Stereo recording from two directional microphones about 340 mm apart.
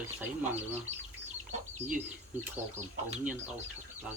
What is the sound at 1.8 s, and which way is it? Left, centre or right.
Speech, centre.